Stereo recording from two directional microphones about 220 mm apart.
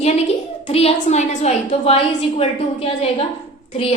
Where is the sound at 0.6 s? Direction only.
25° left (ahead or behind).